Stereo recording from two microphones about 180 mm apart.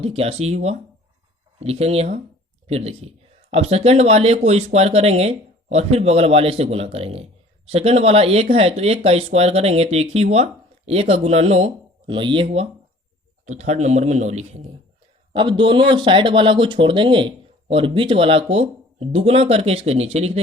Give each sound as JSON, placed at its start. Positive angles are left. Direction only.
{"t": 0.0, "sound": "speech", "side_deg": -35}
{"t": 13.4, "sound": "speech", "side_deg": -40}
{"t": 15.3, "sound": "speech", "side_deg": -25}